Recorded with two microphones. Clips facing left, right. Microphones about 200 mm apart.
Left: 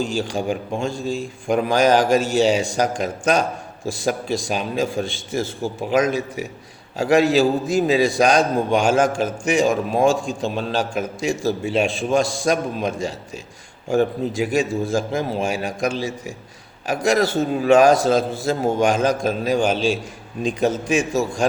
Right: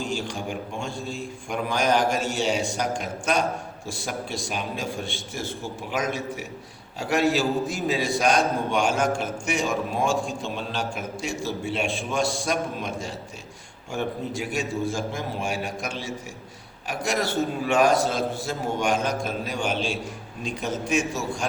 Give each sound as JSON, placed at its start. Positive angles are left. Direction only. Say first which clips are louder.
{"t": 0.0, "sound": "a man's voice", "louder": "left 7 dB", "side_deg": 90}